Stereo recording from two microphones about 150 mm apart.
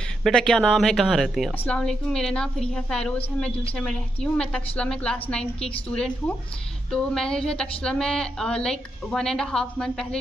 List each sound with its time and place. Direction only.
0.2 s a woman's voice: 5° left (ahead or behind)